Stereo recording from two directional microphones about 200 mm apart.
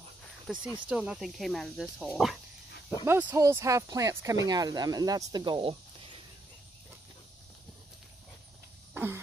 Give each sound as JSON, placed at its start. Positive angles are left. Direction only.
{"t": 0.5, "sound": "speech", "side_deg": 0}
{"t": 8.9, "sound": "fart", "side_deg": -10}